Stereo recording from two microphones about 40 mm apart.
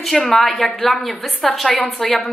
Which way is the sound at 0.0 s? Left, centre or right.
Centre.